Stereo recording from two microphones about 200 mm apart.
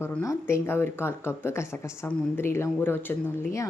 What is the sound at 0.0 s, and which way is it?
Speech, 10° left (ahead or behind).